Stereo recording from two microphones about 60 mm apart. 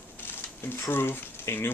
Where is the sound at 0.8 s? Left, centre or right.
Left.